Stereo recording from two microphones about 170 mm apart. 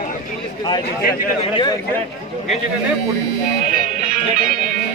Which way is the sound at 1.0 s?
55° left (ahead or behind).